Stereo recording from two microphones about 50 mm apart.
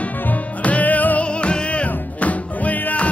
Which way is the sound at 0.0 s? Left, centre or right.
Left.